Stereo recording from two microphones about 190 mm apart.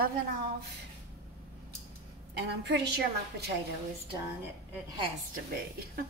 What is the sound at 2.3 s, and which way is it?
A woman's voice, 60° right (ahead or behind).